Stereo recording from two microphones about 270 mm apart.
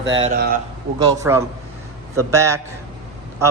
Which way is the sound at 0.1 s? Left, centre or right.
Right.